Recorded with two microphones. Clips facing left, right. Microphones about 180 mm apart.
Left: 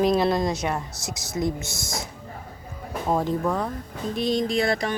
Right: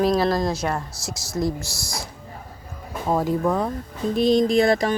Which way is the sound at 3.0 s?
5° right (ahead or behind).